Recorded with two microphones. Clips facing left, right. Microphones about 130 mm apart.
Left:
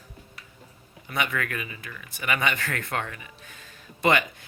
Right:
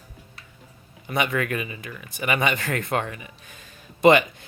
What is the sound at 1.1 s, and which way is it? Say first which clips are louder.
A man's voice: right 5 dB; 20° right (ahead or behind).